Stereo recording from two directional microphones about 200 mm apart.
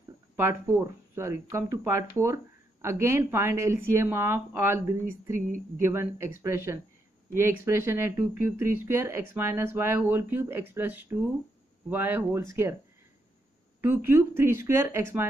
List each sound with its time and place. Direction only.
0.4 s speech: 15° right (ahead or behind)
13.7 s speech: 10° right (ahead or behind)